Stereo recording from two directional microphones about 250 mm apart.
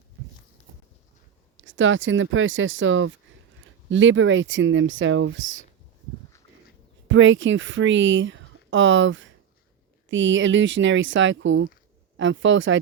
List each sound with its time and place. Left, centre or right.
1.5 s speech: right
7.1 s speech: right